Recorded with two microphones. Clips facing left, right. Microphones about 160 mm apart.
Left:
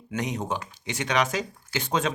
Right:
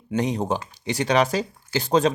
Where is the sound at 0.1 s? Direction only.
30° right (ahead or behind).